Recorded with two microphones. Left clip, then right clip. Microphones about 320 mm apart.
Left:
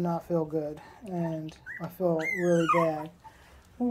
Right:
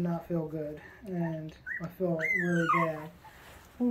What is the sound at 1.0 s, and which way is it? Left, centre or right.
Speech, centre.